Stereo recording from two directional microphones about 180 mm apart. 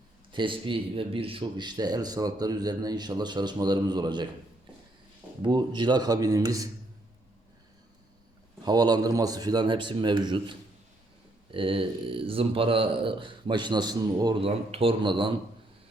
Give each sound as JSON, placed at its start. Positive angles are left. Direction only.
{"t": 0.3, "sound": "speech", "side_deg": -25}
{"t": 5.4, "sound": "speech", "side_deg": -25}
{"t": 8.6, "sound": "speech", "side_deg": -20}